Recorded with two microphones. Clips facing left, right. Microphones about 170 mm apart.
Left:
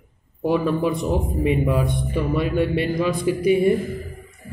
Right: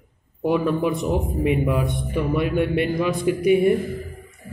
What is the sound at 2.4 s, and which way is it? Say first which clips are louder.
A man's voice: even; 55° right (ahead or behind).